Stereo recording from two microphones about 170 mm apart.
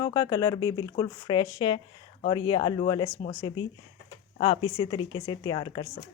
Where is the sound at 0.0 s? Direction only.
20° left (ahead or behind).